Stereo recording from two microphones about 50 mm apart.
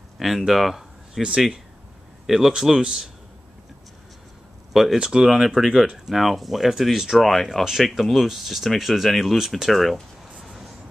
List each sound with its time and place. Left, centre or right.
0.2 s speech: centre
1.2 s speech: centre
4.9 s speech: centre